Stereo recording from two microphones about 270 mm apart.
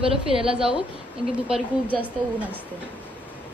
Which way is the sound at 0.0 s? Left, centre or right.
Centre.